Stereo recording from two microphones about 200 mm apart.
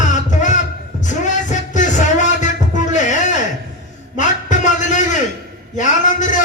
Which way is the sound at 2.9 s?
35° left (ahead or behind).